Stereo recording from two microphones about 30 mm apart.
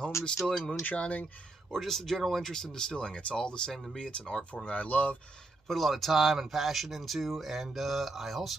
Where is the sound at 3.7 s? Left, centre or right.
Centre.